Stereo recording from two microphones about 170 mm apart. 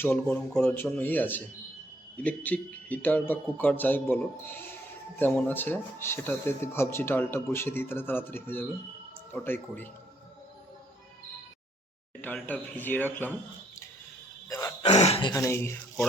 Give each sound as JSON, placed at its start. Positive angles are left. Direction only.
{"t": 0.0, "sound": "speech", "side_deg": 10}
{"t": 12.2, "sound": "speech", "side_deg": 10}
{"t": 14.5, "sound": "throat clearing", "side_deg": 20}
{"t": 14.8, "sound": "speech", "side_deg": 40}
{"t": 15.3, "sound": "speech", "side_deg": 15}